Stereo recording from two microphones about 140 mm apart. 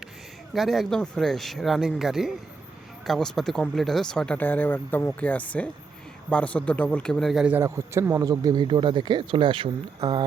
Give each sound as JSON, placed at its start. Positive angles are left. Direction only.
{"t": 0.5, "sound": "speech", "side_deg": 0}
{"t": 7.6, "sound": "speech", "side_deg": -20}